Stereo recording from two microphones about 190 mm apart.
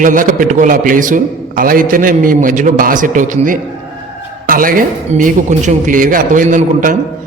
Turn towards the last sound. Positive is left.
turn(degrees=-40)  # may be behind; listen again after turning